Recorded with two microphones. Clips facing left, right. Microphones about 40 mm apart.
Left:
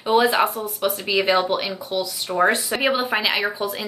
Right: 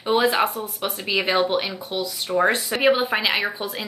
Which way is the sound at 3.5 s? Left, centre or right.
Right.